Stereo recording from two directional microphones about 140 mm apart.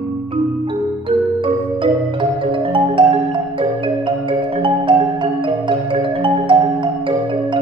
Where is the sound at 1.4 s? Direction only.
40° right (ahead or behind).